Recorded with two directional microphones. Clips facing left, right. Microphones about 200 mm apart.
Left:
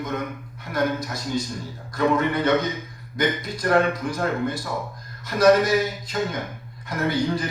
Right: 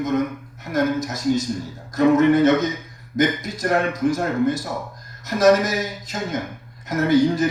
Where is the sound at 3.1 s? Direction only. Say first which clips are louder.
Right 4 dB; 45° right (ahead or behind).